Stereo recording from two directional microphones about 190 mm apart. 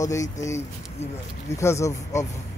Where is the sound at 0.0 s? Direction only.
15° left (ahead or behind).